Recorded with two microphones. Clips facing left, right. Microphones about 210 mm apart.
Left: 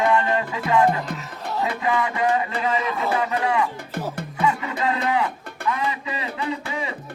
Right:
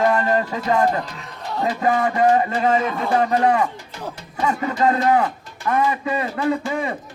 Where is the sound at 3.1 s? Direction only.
45° right (ahead or behind).